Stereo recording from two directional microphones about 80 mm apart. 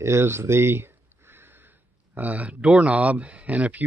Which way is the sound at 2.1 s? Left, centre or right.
Centre.